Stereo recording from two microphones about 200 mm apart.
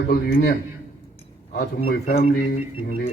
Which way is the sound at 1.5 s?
50° left (ahead or behind).